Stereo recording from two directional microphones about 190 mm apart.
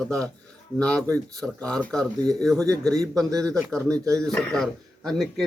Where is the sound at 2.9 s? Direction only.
15° right (ahead or behind).